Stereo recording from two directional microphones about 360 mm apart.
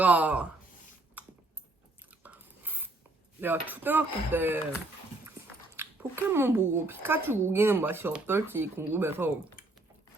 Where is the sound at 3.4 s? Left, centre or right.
Centre.